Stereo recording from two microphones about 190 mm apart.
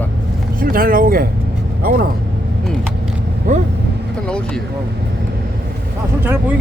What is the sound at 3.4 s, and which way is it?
Speech, 45° right (ahead or behind).